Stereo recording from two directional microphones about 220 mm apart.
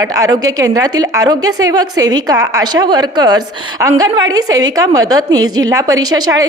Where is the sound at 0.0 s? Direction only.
15° right (ahead or behind).